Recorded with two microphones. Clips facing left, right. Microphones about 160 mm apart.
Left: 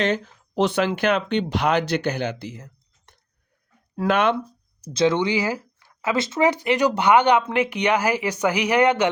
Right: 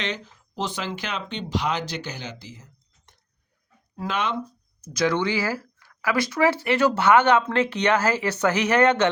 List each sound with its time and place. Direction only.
0.0 s speech: 55° left (ahead or behind)
3.9 s speech: 60° left (ahead or behind)
4.8 s speech: 25° left (ahead or behind)